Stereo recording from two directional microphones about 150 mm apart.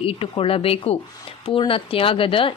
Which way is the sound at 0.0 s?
35° left (ahead or behind).